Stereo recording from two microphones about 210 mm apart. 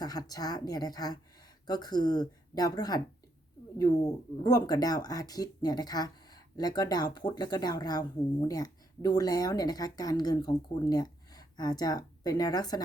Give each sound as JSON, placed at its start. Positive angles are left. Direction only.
{"t": 0.0, "sound": "speech", "side_deg": 20}